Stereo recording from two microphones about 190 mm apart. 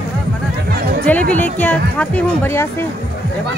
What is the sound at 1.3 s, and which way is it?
Speech, 10° left (ahead or behind).